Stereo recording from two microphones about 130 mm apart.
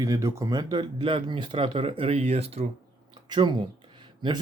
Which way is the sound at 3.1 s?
35° right (ahead or behind).